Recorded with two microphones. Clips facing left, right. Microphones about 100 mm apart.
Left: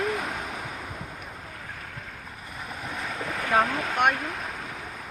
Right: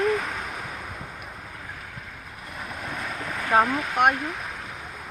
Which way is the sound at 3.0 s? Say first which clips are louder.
Left 2 dB; 20° left (ahead or behind).